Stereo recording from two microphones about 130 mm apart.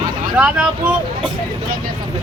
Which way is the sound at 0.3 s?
10° right (ahead or behind).